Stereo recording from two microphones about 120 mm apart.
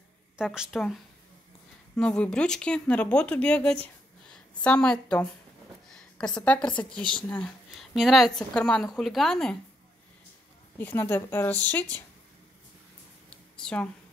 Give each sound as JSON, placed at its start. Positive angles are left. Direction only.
{"t": 0.4, "sound": "speech", "side_deg": -5}
{"t": 2.0, "sound": "a woman's voice", "side_deg": 10}
{"t": 5.9, "sound": "a sound", "side_deg": 5}
{"t": 7.0, "sound": "speech", "side_deg": -40}
{"t": 7.2, "sound": "speech", "side_deg": 10}
{"t": 7.9, "sound": "speech", "side_deg": 0}
{"t": 10.8, "sound": "speech", "side_deg": 15}
{"t": 13.3, "sound": "a sound", "side_deg": 5}